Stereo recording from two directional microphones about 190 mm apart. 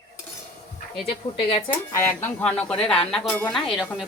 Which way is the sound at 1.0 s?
30° left (ahead or behind).